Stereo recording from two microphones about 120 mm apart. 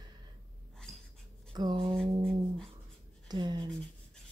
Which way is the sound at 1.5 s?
35° right (ahead or behind).